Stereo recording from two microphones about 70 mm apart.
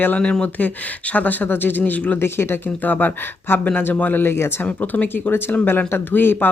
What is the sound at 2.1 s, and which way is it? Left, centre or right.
Speech, left.